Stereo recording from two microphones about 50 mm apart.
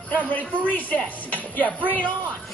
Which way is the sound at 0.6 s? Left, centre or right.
Left.